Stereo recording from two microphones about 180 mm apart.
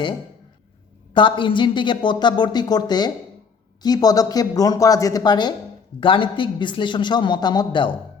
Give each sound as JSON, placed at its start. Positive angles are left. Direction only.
{"t": 1.1, "sound": "a man's voice", "side_deg": 25}